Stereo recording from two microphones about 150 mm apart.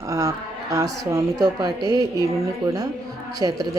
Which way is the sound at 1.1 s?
25° right (ahead or behind).